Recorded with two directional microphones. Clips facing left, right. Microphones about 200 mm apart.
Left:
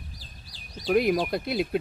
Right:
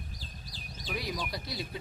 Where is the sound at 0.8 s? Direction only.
60° left (ahead or behind).